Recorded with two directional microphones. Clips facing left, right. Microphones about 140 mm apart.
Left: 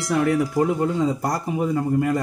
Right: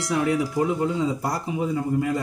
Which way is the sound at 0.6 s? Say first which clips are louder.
Left 2 dB; 55° left (ahead or behind).